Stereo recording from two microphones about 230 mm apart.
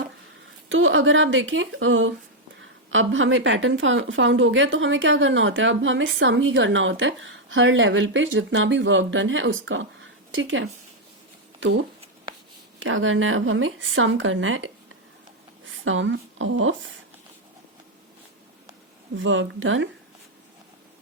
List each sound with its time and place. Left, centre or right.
0.7 s a woman's voice: right
12.8 s a woman's voice: right
19.1 s a woman's voice: right